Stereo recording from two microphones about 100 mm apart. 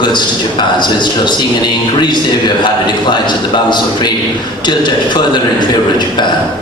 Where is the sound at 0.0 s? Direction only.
50° left (ahead or behind).